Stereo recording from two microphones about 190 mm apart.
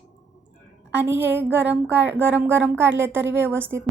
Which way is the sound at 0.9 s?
10° right (ahead or behind).